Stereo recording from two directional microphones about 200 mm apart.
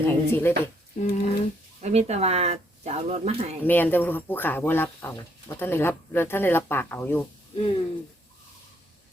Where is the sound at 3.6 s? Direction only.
10° left (ahead or behind).